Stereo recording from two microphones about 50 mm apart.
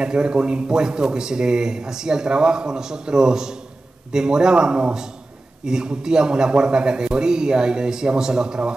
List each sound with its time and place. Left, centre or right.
0.0 s speech: centre